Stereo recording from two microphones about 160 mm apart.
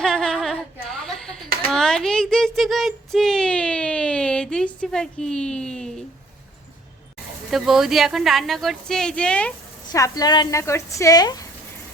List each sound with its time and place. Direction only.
0.0 s a sound: 5° left (ahead or behind)
7.5 s a woman's voice: centre (ahead or behind)
9.9 s a woman's voice: 20° left (ahead or behind)